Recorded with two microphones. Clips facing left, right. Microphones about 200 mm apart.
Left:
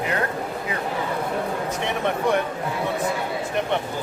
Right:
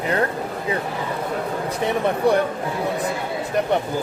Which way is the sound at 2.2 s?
35° right (ahead or behind).